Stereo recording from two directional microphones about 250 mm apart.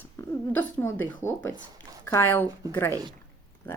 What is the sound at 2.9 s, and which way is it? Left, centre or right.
Speech, centre.